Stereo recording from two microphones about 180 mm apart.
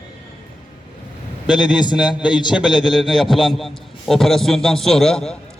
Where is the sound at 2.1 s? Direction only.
5° right (ahead or behind).